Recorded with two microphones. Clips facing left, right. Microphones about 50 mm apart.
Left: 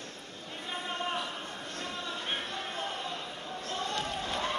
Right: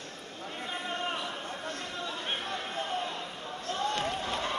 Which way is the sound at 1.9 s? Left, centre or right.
Right.